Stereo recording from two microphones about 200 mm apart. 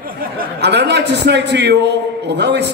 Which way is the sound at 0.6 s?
55° right (ahead or behind).